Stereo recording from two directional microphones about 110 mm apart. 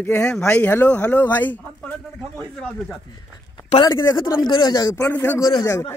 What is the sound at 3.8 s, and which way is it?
Speech, 40° left (ahead or behind).